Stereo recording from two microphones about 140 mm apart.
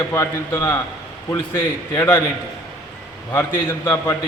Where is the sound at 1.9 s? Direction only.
20° left (ahead or behind).